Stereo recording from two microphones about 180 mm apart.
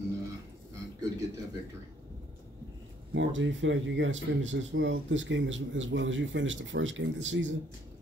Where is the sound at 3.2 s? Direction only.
90° right.